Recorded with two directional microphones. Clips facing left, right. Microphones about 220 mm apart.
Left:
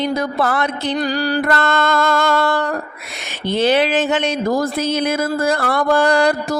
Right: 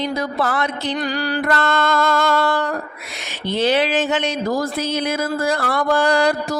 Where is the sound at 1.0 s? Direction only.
35° left (ahead or behind).